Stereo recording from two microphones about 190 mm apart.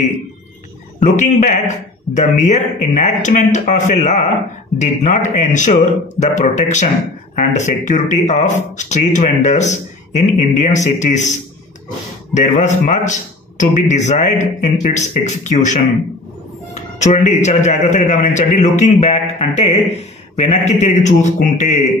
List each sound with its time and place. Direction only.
0.9 s speech: 40° left (ahead or behind)
12.4 s speech: 40° left (ahead or behind)